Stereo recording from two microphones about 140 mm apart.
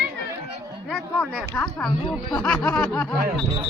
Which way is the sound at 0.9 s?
10° left (ahead or behind).